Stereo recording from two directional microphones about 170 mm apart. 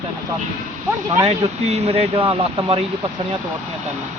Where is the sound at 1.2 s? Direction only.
40° right (ahead or behind).